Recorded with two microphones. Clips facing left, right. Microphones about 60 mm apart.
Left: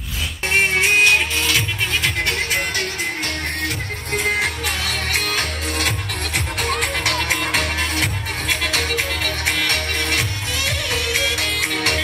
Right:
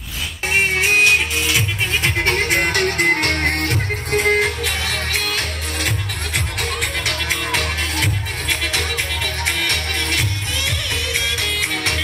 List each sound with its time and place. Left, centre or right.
0.5 s music: centre
2.0 s music: right
5.4 s music: left
8.8 s music: left
11.7 s music: left